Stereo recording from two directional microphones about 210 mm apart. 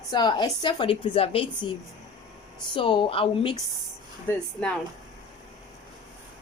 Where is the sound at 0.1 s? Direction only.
20° left (ahead or behind).